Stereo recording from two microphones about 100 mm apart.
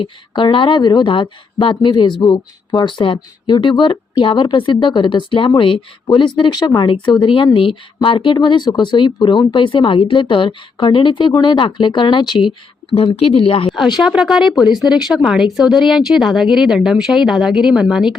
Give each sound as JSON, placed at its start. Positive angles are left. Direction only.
{"t": 0.0, "sound": "speech", "side_deg": 55}
{"t": 12.9, "sound": "speech", "side_deg": 75}
{"t": 14.0, "sound": "speech", "side_deg": -5}